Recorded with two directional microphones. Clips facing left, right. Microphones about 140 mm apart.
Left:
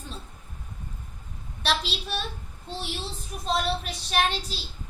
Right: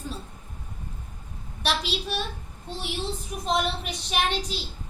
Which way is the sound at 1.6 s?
15° right (ahead or behind).